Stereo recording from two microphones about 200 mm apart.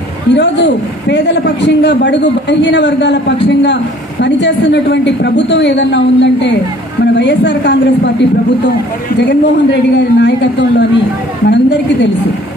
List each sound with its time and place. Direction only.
0.3 s a man's voice: 60° left (ahead or behind)
9.3 s a man's voice: 60° left (ahead or behind)